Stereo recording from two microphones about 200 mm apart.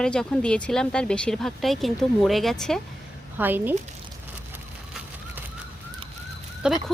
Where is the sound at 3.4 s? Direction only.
10° right (ahead or behind).